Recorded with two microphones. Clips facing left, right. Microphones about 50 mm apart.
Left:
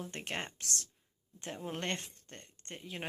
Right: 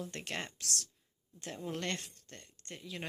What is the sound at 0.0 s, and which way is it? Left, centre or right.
Speech, left.